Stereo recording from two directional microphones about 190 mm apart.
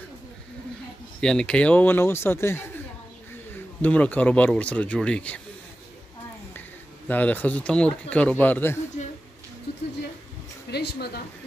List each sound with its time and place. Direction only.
1.2 s a man's voice: 5° left (ahead or behind)
7.1 s speech: 10° left (ahead or behind)
10.7 s a sound: 60° left (ahead or behind)